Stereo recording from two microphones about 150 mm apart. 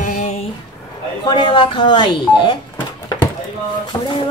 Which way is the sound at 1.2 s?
30° left (ahead or behind).